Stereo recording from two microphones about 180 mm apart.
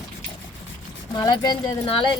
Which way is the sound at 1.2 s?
25° left (ahead or behind).